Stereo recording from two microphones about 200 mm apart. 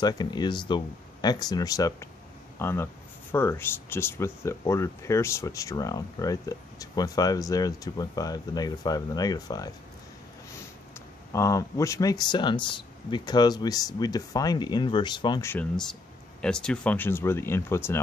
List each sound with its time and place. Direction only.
0.0 s speech: 20° left (ahead or behind)
11.3 s speech: 15° left (ahead or behind)
15.5 s speech: 5° left (ahead or behind)